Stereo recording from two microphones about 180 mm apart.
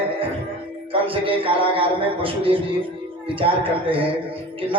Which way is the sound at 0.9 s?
30° right (ahead or behind).